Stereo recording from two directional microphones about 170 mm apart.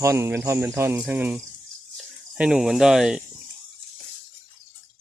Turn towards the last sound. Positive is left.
turn(degrees=-5)  # may be behind; listen again after turning